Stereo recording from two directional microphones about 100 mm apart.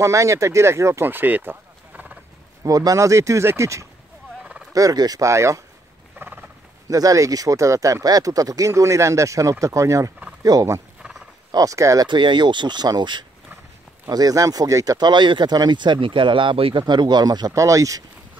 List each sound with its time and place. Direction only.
0.0 s speech: 30° right (ahead or behind)
2.6 s speech: 35° right (ahead or behind)
4.4 s a sound: 10° right (ahead or behind)
4.7 s speech: 40° right (ahead or behind)
6.1 s a sound: 20° right (ahead or behind)
6.9 s speech: 35° right (ahead or behind)
11.0 s wild animals: 5° right (ahead or behind)
11.5 s speech: 35° right (ahead or behind)
12.1 s speech: 50° right (ahead or behind); by 15.0 s 35° right (ahead or behind)
15.0 s speech: 50° right (ahead or behind)
16.8 s speech: 50° right (ahead or behind)